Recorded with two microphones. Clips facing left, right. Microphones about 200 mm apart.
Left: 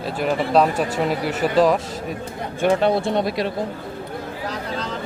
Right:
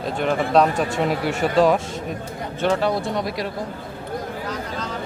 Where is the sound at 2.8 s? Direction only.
25° left (ahead or behind).